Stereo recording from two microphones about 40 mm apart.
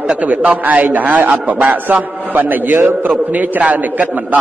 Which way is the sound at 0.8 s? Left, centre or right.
Right.